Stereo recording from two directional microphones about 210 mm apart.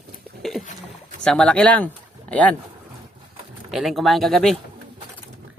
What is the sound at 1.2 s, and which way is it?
Speech, 5° left (ahead or behind).